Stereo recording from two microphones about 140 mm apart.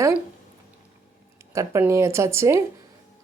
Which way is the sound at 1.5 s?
20° right (ahead or behind).